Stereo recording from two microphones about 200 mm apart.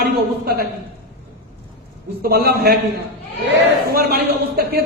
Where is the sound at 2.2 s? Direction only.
50° right (ahead or behind).